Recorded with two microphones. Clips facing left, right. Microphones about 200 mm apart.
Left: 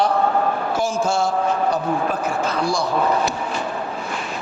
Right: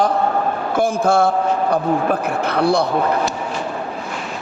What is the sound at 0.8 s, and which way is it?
Speech, 60° right (ahead or behind).